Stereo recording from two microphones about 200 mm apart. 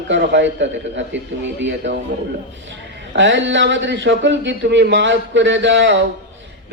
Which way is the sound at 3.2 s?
65° right (ahead or behind).